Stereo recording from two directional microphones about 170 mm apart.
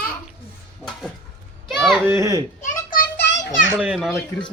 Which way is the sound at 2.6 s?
55° left (ahead or behind).